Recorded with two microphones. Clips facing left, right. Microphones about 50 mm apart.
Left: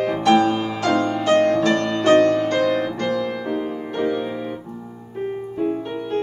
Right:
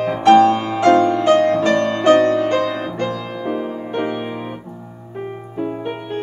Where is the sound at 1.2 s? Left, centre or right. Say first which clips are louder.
Right 3 dB; right.